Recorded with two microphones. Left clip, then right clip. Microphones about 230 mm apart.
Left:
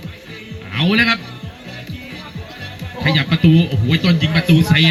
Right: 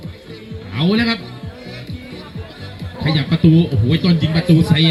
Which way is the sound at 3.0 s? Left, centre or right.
Left.